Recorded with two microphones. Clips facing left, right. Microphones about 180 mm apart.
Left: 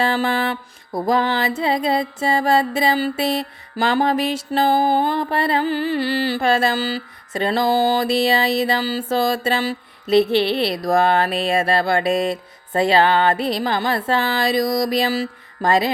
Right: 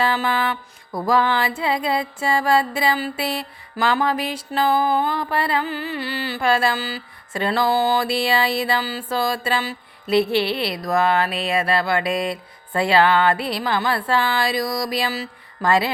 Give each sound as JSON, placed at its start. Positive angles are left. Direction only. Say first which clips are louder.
{"t": 0.0, "sound": "mantra", "louder": "left 2 dB", "side_deg": 30}
{"t": 1.4, "sound": "music", "louder": "left 2 dB", "side_deg": 40}
{"t": 1.6, "sound": "mantra", "louder": "left 3 dB", "side_deg": 20}
{"t": 7.5, "sound": "speech", "louder": "left 2 dB", "side_deg": 45}
{"t": 8.1, "sound": "mantra", "louder": "left 3 dB", "side_deg": 20}
{"t": 12.7, "sound": "music", "louder": "left 1 dB", "side_deg": 40}
{"t": 13.6, "sound": "speech", "louder": "left 1 dB", "side_deg": 45}
{"t": 13.9, "sound": "mantra", "louder": "left 1 dB", "side_deg": 20}